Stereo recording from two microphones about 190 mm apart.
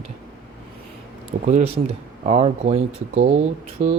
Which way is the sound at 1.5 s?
35° right (ahead or behind).